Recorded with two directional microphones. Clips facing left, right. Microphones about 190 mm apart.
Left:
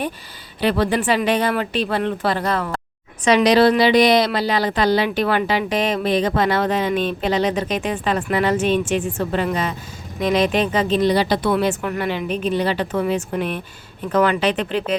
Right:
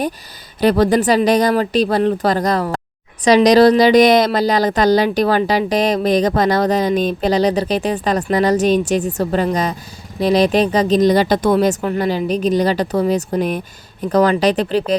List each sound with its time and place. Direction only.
0.6 s a woman's voice: 40° right (ahead or behind)